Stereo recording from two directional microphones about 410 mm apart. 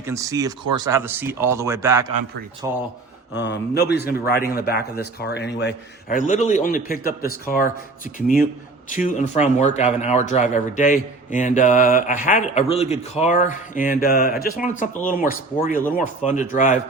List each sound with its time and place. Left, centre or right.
0.0 s speech: centre
3.3 s a man's voice: left